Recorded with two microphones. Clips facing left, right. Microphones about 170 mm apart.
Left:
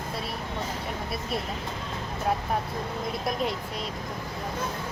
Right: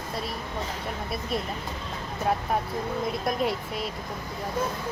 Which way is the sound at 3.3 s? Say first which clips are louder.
Right 1 dB; 5° right (ahead or behind).